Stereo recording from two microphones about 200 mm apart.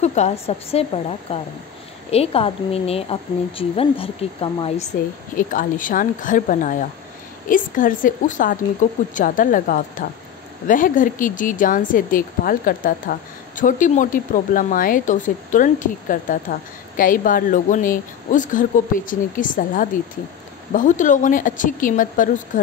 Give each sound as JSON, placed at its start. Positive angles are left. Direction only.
{"t": 0.0, "sound": "a woman's voice", "side_deg": 35}
{"t": 5.3, "sound": "a woman's voice", "side_deg": 40}